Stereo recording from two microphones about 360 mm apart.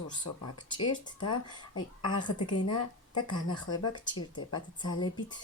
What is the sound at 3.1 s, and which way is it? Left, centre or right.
A woman's voice, centre.